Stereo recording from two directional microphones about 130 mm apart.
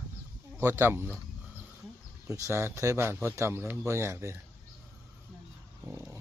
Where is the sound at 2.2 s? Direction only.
20° right (ahead or behind).